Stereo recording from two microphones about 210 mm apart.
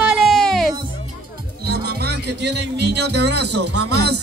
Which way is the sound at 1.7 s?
50° right (ahead or behind).